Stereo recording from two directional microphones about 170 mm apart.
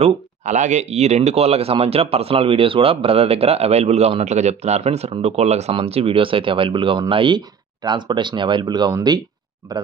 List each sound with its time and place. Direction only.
0.0 s speech: 45° right (ahead or behind); by 9.2 s 25° right (ahead or behind)